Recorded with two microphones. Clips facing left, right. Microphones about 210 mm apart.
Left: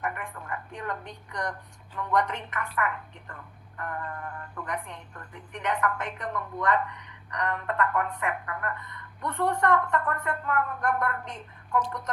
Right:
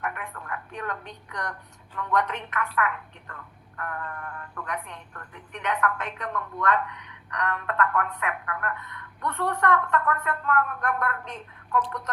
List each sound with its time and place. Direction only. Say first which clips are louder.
0.7 s speech: right 2 dB; 10° left (ahead or behind)
6.9 s telephone: right 2 dB; 65° right (ahead or behind)
7.3 s speech: right 1 dB; 10° left (ahead or behind)